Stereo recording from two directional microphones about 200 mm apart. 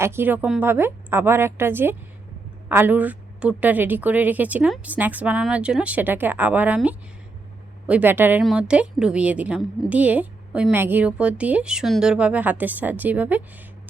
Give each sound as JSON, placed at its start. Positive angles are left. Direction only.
{"t": 0.0, "sound": "a woman's voice", "side_deg": -10}